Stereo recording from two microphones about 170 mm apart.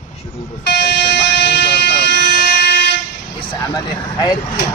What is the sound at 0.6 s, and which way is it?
Vehicle, 75° left (ahead or behind).